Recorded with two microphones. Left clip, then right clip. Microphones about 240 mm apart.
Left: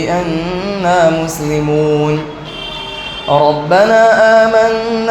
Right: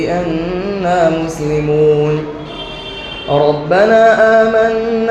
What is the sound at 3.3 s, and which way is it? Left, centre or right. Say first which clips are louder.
Music: left 2 dB; left.